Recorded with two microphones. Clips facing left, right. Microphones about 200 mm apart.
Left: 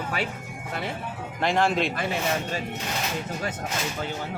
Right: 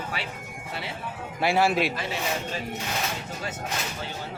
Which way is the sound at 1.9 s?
50° left (ahead or behind).